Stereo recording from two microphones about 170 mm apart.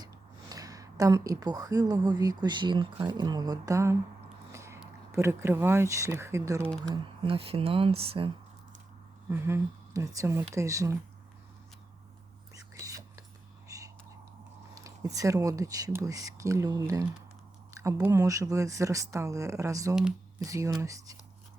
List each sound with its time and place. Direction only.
0.0 s speech: 20° right (ahead or behind)
4.5 s a sound: 15° right (ahead or behind)
5.1 s speech: 15° right (ahead or behind)
6.7 s speech: 5° left (ahead or behind)
6.9 s speech: 30° right (ahead or behind)
9.3 s speech: 15° right (ahead or behind)
12.7 s whispering: 20° right (ahead or behind)
14.8 s speech: 20° right (ahead or behind)